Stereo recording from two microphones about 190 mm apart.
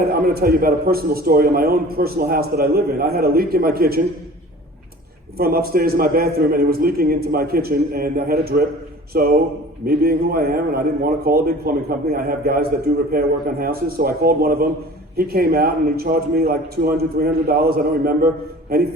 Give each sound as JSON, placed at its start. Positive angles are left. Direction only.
{"t": 0.1, "sound": "a man's voice", "side_deg": -55}
{"t": 5.4, "sound": "a man's voice", "side_deg": -55}